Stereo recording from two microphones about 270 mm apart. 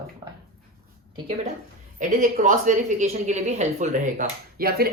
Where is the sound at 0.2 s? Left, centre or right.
Centre.